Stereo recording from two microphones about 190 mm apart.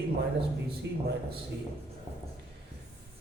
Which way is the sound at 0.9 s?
65° right (ahead or behind).